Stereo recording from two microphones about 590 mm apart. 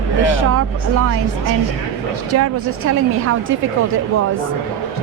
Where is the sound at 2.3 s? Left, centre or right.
Right.